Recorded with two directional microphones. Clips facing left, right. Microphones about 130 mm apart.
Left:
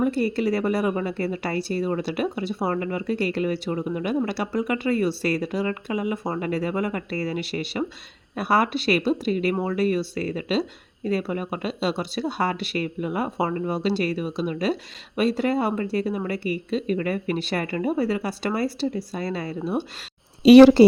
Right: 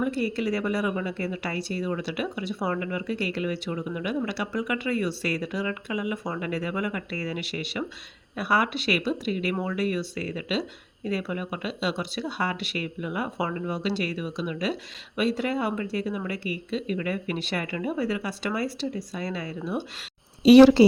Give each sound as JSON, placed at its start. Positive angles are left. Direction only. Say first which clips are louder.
{"t": 0.0, "sound": "speech", "louder": "left 4 dB", "side_deg": 35}
{"t": 20.4, "sound": "speech", "louder": "left 3 dB", "side_deg": 60}